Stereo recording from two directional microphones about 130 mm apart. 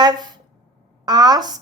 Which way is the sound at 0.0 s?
35° right (ahead or behind).